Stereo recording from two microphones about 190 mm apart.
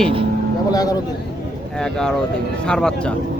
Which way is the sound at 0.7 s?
20° left (ahead or behind).